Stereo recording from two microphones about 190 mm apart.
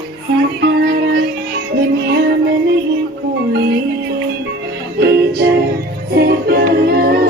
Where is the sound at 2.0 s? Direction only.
60° right (ahead or behind).